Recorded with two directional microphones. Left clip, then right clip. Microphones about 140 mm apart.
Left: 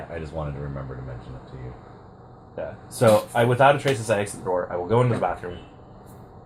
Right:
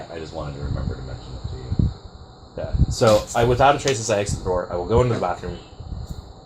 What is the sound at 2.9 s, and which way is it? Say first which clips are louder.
Speech: right 1 dB; 90° right.